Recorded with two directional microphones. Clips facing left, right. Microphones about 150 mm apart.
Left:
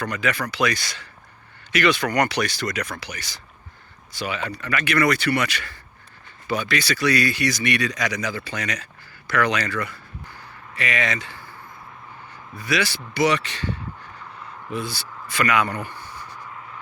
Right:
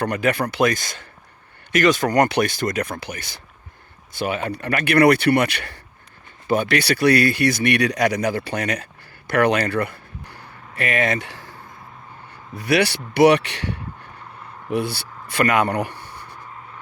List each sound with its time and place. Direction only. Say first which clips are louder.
0.0 s speech: right 5 dB; 55° right (ahead or behind)
11.3 s a sound: right 2 dB; 90° right
12.3 s speech: right 6 dB; 65° right (ahead or behind)